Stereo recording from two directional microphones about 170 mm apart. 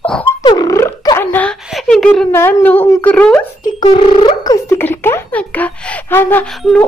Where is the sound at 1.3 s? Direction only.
10° left (ahead or behind).